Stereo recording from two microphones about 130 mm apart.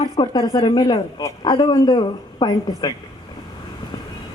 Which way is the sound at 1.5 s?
35° left (ahead or behind).